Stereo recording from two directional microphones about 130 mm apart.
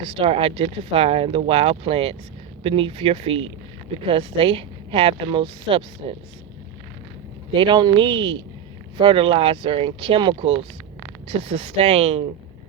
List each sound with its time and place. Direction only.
0.0 s a woman's voice: 45° right (ahead or behind)
7.5 s a woman's voice: 40° right (ahead or behind)